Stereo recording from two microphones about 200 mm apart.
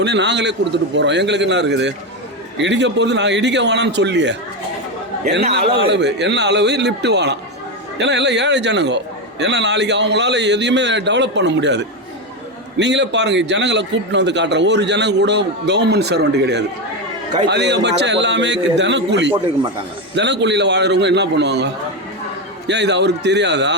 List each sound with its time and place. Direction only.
0.0 s a man's voice: 60° right (ahead or behind)
5.7 s a man's voice: 60° right (ahead or behind)